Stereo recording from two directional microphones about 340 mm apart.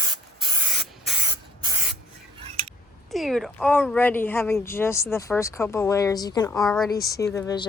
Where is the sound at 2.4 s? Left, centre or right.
Centre.